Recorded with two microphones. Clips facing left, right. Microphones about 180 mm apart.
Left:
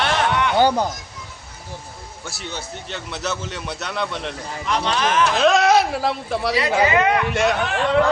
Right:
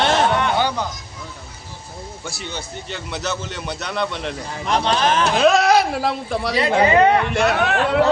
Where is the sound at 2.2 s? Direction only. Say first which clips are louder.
Even; 5° left (ahead or behind).